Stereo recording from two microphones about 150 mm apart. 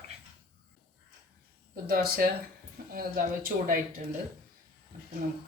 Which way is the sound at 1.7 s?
75° right (ahead or behind).